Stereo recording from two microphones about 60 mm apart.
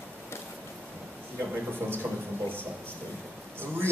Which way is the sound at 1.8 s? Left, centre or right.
Right.